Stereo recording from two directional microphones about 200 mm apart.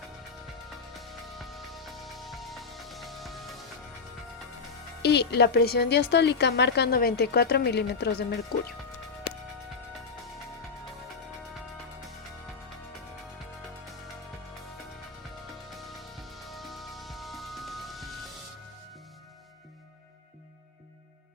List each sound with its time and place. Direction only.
0.9 s music: centre (ahead or behind)
5.0 s a woman's voice: 55° left (ahead or behind)
15.7 s music: centre (ahead or behind)